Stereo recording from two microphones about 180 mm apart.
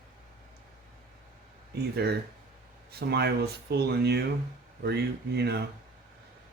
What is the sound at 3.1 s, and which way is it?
Speech, 65° right (ahead or behind).